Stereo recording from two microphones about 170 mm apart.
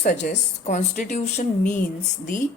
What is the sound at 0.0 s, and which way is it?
Speech, 45° left (ahead or behind).